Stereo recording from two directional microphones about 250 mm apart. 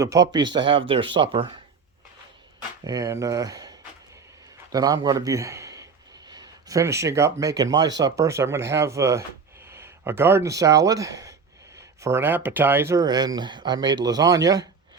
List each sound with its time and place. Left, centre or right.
0.0 s speech: centre
2.8 s a man's voice: centre